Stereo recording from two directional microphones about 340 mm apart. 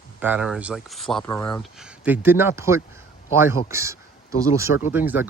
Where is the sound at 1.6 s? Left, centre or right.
Centre.